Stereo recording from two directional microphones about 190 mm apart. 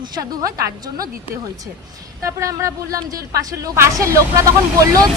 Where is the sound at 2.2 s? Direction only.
15° right (ahead or behind).